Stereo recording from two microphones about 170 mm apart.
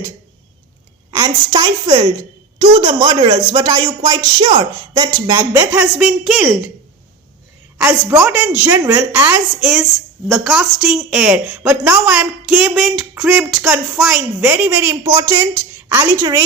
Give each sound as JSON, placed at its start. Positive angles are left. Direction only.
{"t": 1.1, "sound": "speech", "side_deg": -20}
{"t": 5.8, "sound": "speech", "side_deg": -5}
{"t": 8.2, "sound": "a woman's voice", "side_deg": -5}
{"t": 10.2, "sound": "a woman's voice", "side_deg": 0}